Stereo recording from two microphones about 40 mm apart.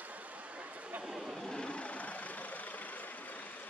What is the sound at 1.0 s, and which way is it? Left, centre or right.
Vehicle, centre.